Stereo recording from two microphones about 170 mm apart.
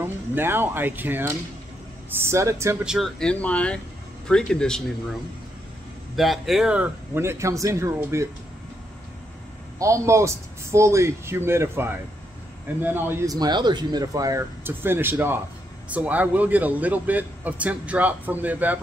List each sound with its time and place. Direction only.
0.0 s speech: 15° right (ahead or behind)
2.8 s speech: centre (ahead or behind)
6.1 s speech: centre (ahead or behind); by 8.3 s 15° right (ahead or behind)
9.8 s speech: 15° right (ahead or behind)